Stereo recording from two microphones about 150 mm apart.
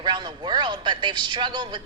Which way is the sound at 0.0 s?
30° right (ahead or behind).